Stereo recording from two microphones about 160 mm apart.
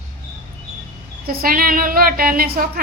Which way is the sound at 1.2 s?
70° right (ahead or behind).